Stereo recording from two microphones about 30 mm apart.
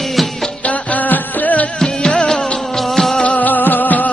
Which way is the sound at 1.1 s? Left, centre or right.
Left.